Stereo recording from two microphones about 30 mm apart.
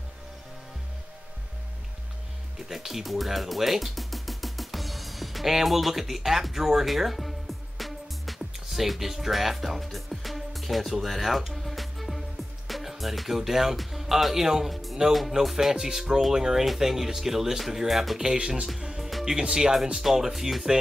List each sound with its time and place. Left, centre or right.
2.7 s speech: centre
3.3 s music: centre
13.3 s speech: centre
14.7 s music: centre
15.4 s speech: right
15.8 s speech: centre
18.2 s speech: centre
18.9 s music: centre
19.5 s speech: centre